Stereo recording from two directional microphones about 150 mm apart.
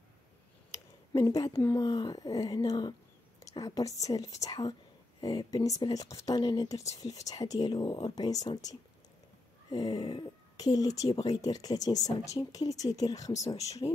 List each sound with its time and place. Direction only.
1.6 s speech: 15° left (ahead or behind)